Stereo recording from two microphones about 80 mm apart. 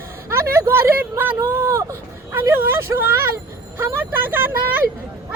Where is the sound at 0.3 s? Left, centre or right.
Right.